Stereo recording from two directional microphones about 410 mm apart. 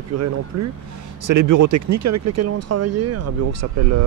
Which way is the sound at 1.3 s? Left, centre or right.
Right.